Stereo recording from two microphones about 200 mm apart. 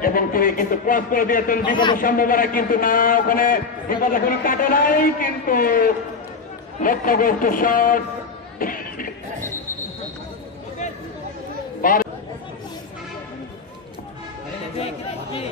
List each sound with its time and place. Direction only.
0.0 s a man's voice: 45° left (ahead or behind)
1.7 s a man's voice: 25° left (ahead or behind)
2.0 s a man's voice: 45° left (ahead or behind)
8.5 s a sound: 45° left (ahead or behind)
11.8 s chatter: 45° left (ahead or behind)
14.8 s chatter: 30° left (ahead or behind)